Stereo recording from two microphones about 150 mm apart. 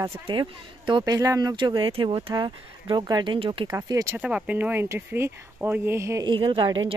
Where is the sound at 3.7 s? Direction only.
20° right (ahead or behind).